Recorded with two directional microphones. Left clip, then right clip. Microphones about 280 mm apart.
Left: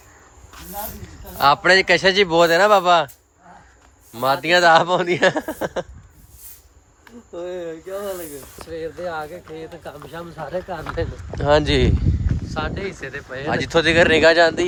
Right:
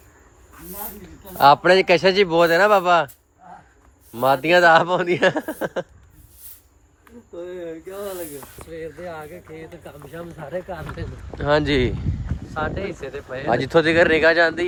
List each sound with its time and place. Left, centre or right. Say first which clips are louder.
1.4 s speech: right 1 dB; centre
4.1 s speech: right 1 dB; centre
7.0 s speech: left 4 dB; left
11.0 s speech: left 10 dB; left
11.3 s speech: left 2 dB; centre
13.1 s speech: right 3 dB; centre